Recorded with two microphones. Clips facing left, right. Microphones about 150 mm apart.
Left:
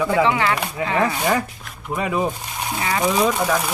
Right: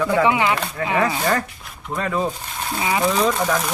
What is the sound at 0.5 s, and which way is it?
Speech, 15° left (ahead or behind).